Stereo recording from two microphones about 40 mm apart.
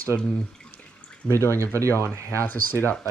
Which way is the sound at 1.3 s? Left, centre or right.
Left.